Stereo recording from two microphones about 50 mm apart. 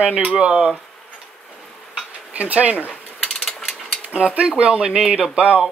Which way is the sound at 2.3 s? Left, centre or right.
Right.